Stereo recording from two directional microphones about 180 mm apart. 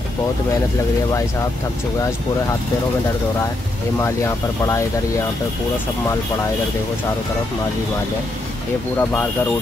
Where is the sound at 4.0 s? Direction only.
15° left (ahead or behind).